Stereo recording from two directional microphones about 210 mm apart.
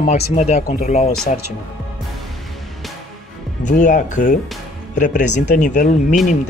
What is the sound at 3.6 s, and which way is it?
Speech, 35° left (ahead or behind).